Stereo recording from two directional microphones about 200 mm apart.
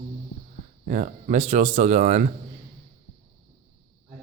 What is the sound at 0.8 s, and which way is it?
Speech, 40° right (ahead or behind).